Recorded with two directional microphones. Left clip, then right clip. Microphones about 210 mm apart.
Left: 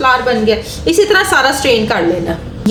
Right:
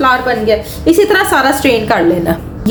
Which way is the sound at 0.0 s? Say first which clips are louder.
Even; 25° right (ahead or behind).